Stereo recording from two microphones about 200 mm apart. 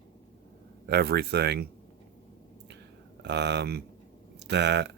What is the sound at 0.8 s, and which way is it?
Speech, 50° right (ahead or behind).